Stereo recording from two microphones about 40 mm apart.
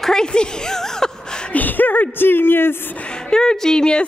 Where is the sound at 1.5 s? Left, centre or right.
Left.